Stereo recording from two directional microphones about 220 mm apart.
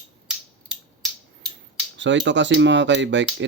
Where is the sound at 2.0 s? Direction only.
55° right (ahead or behind).